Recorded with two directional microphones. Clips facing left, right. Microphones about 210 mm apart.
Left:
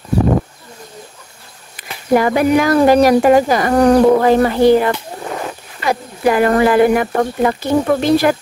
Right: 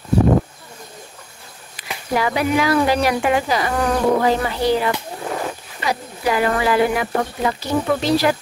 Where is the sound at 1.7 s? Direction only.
50° left (ahead or behind).